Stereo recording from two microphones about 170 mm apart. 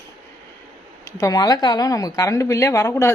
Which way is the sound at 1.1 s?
20° left (ahead or behind).